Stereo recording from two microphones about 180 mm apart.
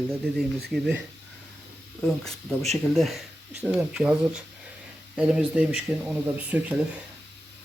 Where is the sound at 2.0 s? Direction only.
Centre (ahead or behind).